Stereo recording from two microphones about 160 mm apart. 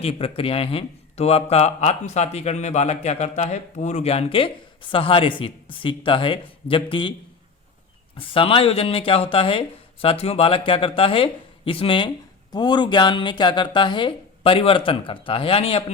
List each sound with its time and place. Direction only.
0.0 s speech: 40° left (ahead or behind)
8.1 s speech: 35° left (ahead or behind)